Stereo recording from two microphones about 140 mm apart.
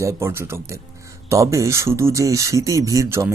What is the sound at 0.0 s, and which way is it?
Speech, 20° right (ahead or behind).